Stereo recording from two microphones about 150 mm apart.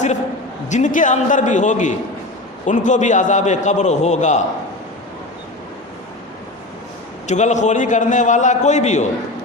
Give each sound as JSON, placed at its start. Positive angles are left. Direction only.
{"t": 0.7, "sound": "a man's voice", "side_deg": 60}
{"t": 7.3, "sound": "a man's voice", "side_deg": 50}